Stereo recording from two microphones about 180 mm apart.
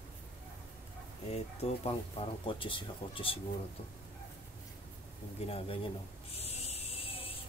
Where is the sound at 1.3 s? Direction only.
35° left (ahead or behind).